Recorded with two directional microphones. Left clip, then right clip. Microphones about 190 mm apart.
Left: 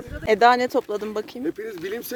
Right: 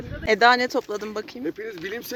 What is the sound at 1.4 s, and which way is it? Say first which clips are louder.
Speech: left 2 dB; 70° left (ahead or behind).